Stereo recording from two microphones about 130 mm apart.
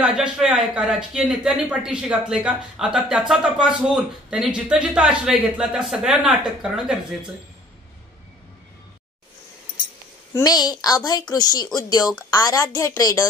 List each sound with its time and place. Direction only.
0.0 s speech: 5° right (ahead or behind)
10.3 s a woman's voice: 30° left (ahead or behind)